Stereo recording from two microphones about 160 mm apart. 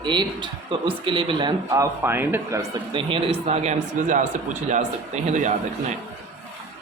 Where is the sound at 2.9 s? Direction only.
35° right (ahead or behind).